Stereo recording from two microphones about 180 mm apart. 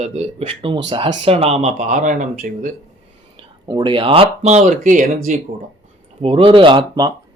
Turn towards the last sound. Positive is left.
turn(degrees=-25)  # may be behind; listen again after turning